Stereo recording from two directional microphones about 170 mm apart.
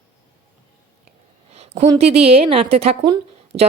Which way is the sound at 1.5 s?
40° right (ahead or behind).